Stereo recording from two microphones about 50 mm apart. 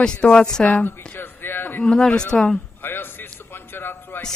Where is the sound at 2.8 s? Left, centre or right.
Left.